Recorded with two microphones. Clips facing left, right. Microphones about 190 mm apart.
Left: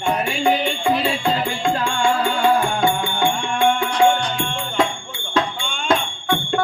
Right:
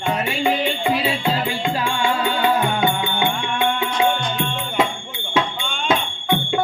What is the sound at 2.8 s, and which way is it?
Music, 20° right (ahead or behind).